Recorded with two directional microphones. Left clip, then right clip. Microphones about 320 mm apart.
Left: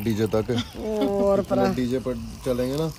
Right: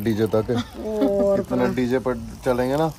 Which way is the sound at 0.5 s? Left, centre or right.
Left.